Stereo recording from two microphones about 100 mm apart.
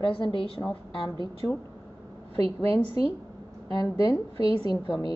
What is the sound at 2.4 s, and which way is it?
Speech, 65° right (ahead or behind).